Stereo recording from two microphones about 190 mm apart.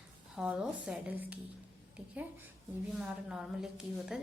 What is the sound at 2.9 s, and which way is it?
A woman's voice, 5° right (ahead or behind).